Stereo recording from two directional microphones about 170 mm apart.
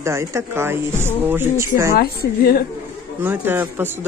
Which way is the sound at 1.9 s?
65° left (ahead or behind).